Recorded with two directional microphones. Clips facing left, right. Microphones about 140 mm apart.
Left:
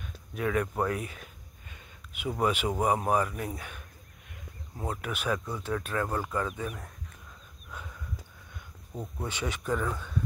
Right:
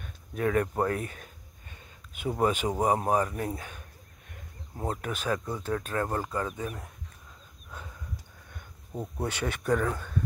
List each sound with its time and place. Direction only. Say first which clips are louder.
0.0 s a sound: right 3 dB; 40° right (ahead or behind)
2.4 s speech: right 1 dB; 40° right (ahead or behind)
9.2 s speech: right 3 dB; 60° right (ahead or behind)